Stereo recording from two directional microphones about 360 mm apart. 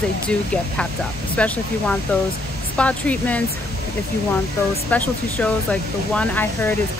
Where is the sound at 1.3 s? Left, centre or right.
Centre.